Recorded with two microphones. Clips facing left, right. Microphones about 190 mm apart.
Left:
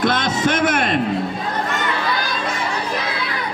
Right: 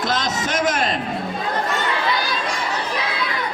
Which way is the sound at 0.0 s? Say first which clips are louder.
Left 5 dB; 55° left (ahead or behind).